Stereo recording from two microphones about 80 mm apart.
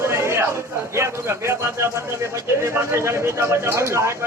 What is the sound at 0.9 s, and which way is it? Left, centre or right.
Speech, right.